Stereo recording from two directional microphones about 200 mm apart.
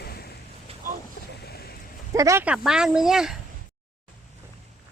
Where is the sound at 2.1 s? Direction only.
15° right (ahead or behind).